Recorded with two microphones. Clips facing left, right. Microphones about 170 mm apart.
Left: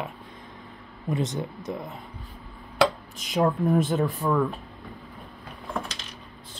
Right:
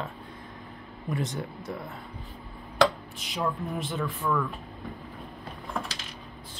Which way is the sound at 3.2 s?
45° left (ahead or behind).